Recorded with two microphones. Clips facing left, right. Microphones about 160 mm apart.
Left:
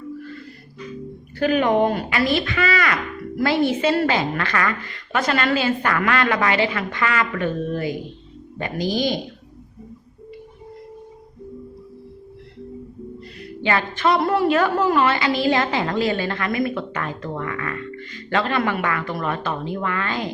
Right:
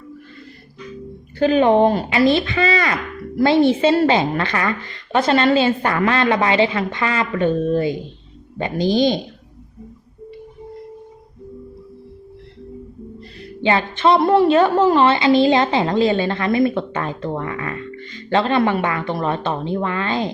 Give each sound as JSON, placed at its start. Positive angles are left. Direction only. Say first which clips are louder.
{"t": 1.4, "sound": "a woman's voice", "louder": "right 4 dB", "side_deg": -25}
{"t": 13.6, "sound": "a woman's voice", "louder": "right 4 dB", "side_deg": -25}